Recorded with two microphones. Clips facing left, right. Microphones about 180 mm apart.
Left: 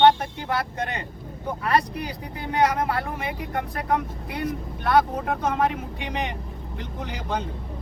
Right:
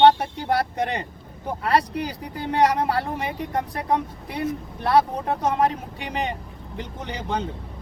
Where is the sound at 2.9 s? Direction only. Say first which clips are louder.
Right 2 dB; 35° right (ahead or behind).